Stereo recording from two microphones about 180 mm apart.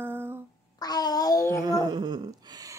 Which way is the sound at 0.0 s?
10° right (ahead or behind).